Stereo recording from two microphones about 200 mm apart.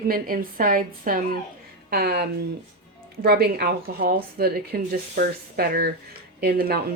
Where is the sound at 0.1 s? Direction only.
45° right (ahead or behind).